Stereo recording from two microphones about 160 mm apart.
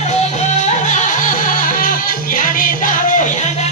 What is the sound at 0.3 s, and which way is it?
Music, 45° left (ahead or behind).